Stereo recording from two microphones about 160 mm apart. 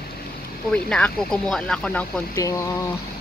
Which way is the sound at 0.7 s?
5° left (ahead or behind).